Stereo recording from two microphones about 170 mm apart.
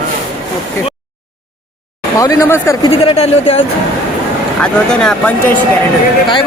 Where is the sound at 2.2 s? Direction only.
20° left (ahead or behind).